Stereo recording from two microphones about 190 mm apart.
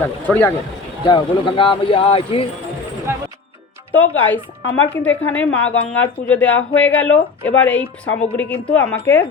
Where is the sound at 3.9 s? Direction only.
10° left (ahead or behind).